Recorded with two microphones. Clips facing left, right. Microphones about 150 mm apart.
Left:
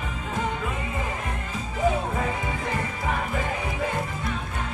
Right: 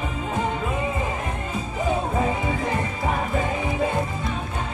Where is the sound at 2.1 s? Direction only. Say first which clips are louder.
Right 4 dB; 25° right (ahead or behind).